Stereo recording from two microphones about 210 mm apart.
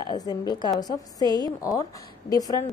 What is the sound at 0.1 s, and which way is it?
A woman's voice, 20° left (ahead or behind).